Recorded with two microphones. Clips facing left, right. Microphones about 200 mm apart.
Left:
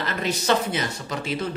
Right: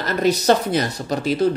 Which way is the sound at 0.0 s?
40° right (ahead or behind).